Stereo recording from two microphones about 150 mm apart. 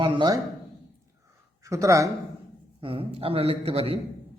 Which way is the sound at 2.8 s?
40° right (ahead or behind).